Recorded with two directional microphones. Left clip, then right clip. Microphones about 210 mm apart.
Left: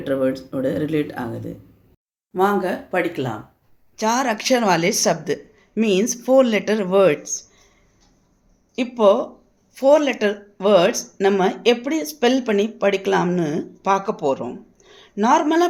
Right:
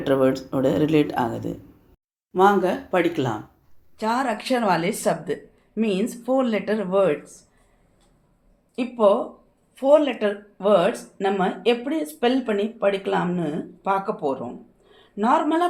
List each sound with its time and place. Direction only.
0.1 s speech: centre (ahead or behind)
3.9 s speech: 30° left (ahead or behind)
8.7 s speech: 40° left (ahead or behind)